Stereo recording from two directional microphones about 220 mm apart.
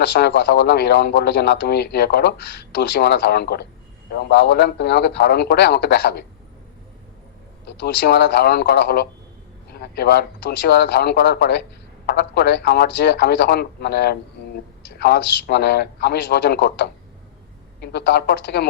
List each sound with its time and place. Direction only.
0.0 s speech: 45° left (ahead or behind)
7.8 s speech: 45° left (ahead or behind)